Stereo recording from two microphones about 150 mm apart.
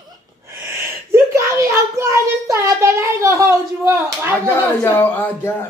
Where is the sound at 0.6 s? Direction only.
15° right (ahead or behind).